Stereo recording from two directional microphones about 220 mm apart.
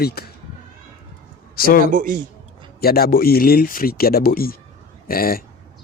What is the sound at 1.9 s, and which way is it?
Speech, 40° right (ahead or behind).